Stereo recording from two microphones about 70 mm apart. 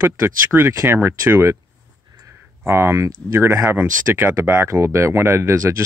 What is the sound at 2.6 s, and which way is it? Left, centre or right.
Speech, right.